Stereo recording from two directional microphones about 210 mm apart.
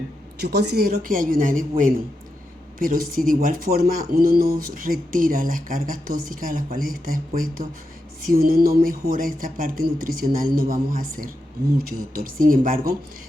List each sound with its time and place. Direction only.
0.3 s a woman's voice: 50° right (ahead or behind)